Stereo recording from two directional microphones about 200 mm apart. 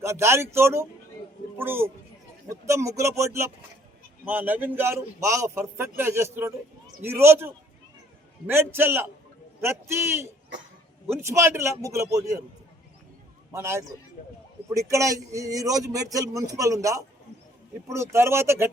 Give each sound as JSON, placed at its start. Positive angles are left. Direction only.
{"t": 0.0, "sound": "a man's voice", "side_deg": -15}
{"t": 13.5, "sound": "a man's voice", "side_deg": -15}